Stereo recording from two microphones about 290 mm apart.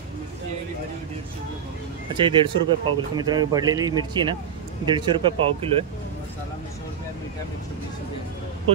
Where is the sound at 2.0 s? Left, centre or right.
Centre.